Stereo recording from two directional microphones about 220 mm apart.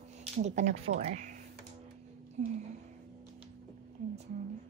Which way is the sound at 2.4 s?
30° right (ahead or behind).